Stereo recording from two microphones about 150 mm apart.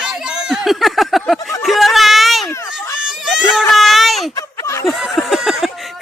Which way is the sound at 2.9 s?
5° right (ahead or behind).